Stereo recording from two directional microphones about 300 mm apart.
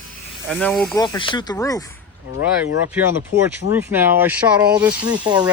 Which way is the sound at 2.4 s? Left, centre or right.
Left.